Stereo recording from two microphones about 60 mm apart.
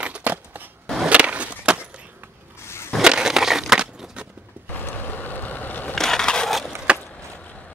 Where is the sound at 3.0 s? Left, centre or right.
Centre.